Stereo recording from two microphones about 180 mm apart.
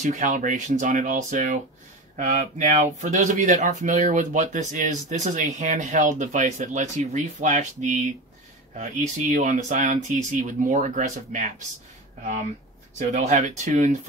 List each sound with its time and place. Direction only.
0.0 s speech: 45° right (ahead or behind)
9.3 s speech: 45° right (ahead or behind)
12.9 s speech: 40° right (ahead or behind)